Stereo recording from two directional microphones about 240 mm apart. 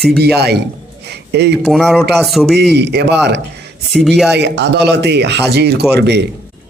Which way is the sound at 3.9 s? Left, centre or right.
Centre.